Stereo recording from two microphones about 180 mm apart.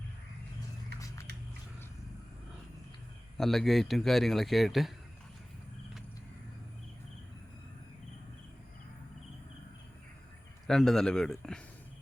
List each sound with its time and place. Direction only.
0.9 s a sound: 20° left (ahead or behind)
3.3 s speech: centre (ahead or behind)
10.7 s speech: centre (ahead or behind)